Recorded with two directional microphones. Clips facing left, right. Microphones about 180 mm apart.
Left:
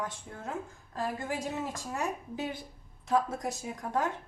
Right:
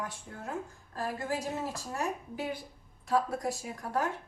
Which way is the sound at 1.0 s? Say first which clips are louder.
Even; 20° left (ahead or behind).